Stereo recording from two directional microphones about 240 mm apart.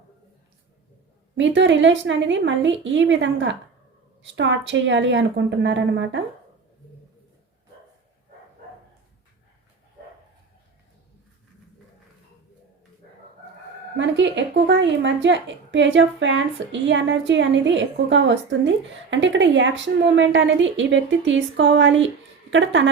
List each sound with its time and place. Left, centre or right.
1.4 s a woman's voice: right
14.0 s a woman's voice: right